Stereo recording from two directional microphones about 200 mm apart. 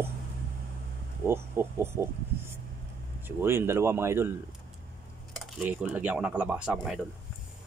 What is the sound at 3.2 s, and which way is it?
Speech, 10° right (ahead or behind).